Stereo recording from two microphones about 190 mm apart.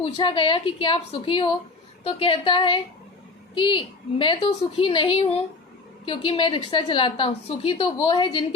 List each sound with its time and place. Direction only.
0.0 s a woman's voice: 25° left (ahead or behind)